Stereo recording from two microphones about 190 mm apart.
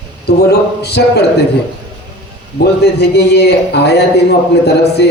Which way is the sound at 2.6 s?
60° left (ahead or behind).